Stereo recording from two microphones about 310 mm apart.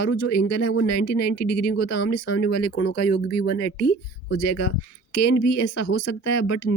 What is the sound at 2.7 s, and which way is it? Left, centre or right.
Speech, left.